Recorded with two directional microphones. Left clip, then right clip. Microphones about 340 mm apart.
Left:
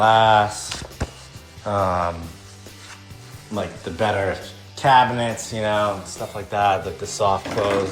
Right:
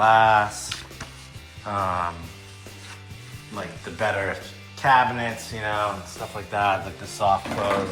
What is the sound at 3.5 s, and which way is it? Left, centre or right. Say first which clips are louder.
Speech: left 6 dB; centre.